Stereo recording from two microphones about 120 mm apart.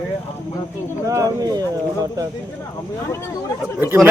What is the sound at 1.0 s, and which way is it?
Speech, 30° right (ahead or behind).